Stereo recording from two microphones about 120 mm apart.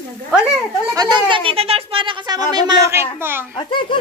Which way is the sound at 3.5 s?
45° left (ahead or behind).